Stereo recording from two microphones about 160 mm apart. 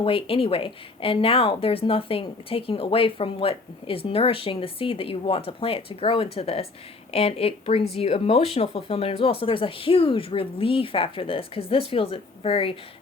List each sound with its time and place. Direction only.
0.0 s speech: 35° left (ahead or behind)